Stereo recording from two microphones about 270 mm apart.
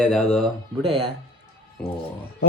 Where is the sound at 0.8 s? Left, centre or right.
Right.